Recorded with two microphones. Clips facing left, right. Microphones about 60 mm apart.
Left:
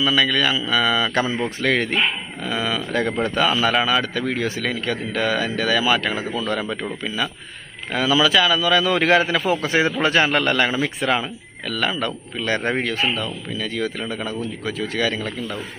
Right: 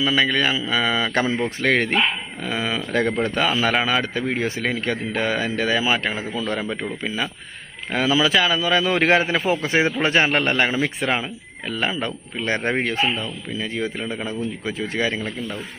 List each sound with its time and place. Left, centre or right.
0.0 s a man's voice: right
7.9 s a man's voice: right